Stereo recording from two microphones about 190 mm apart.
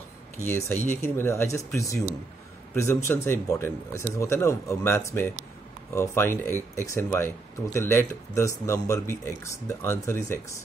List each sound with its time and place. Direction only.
0.5 s speech: 10° left (ahead or behind)